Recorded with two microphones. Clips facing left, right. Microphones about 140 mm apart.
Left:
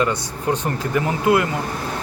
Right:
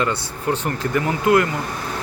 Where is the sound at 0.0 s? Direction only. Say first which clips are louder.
Left 1 dB; 15° left (ahead or behind).